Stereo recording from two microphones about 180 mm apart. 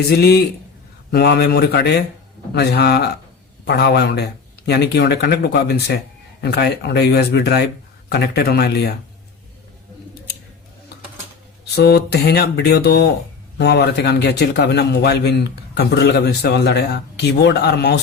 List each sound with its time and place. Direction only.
0.1 s speech: 65° left (ahead or behind)
11.7 s a man's voice: 65° left (ahead or behind)